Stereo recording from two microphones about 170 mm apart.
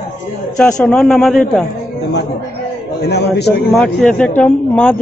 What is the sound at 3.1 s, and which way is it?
Speech, 75° left (ahead or behind).